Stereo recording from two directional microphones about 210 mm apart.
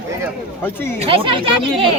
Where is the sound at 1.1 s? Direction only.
25° right (ahead or behind).